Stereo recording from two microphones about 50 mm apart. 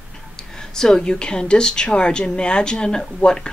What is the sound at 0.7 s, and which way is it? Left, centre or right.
A woman's voice, centre.